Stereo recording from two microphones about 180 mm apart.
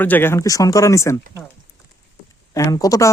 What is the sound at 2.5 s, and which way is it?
Speech, 20° left (ahead or behind).